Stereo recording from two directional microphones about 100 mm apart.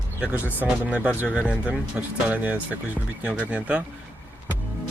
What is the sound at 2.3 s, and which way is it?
Speech, 15° right (ahead or behind).